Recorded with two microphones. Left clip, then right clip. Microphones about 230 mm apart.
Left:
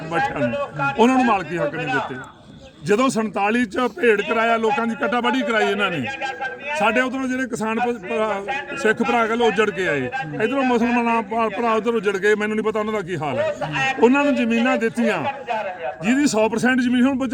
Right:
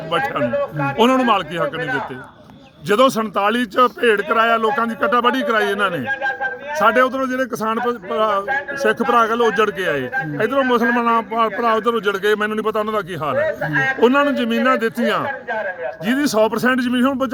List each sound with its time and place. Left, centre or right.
0.5 s speech: left
0.9 s a man's voice: centre
2.9 s a man's voice: centre
6.1 s speech: left
6.7 s a man's voice: centre
13.6 s speech: left
14.0 s a man's voice: centre